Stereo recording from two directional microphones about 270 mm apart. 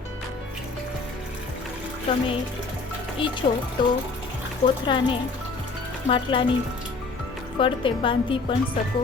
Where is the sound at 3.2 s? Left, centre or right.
Centre.